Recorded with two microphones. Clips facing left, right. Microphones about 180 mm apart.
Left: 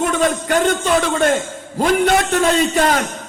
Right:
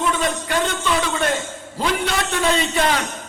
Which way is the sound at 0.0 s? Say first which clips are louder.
Left 4 dB; 45° left (ahead or behind).